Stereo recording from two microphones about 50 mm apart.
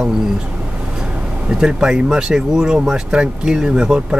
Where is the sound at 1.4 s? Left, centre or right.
Centre.